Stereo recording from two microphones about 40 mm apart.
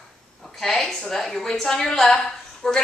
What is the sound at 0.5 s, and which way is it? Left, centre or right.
A woman's voice, centre.